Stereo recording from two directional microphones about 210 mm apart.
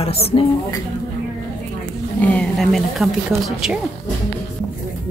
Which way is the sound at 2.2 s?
5° left (ahead or behind).